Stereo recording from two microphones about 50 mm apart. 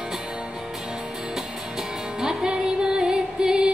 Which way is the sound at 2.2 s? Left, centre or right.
Centre.